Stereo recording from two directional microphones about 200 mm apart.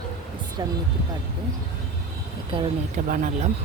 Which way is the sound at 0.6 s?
20° right (ahead or behind).